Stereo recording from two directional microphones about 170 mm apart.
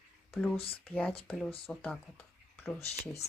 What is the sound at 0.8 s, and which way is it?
Speech, 5° left (ahead or behind).